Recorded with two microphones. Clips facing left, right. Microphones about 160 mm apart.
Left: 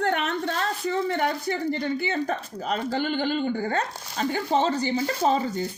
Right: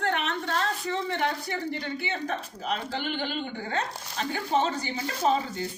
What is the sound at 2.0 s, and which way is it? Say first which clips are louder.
Speech: left 5 dB; 45° left (ahead or behind).